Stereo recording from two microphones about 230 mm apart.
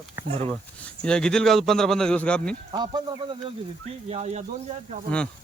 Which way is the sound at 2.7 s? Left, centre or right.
Centre.